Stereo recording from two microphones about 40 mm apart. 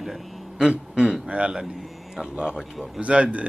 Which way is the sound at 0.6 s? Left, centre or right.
Right.